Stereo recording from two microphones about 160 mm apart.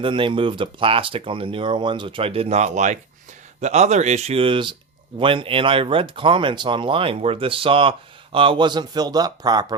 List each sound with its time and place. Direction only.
0.0 s speech: 30° right (ahead or behind)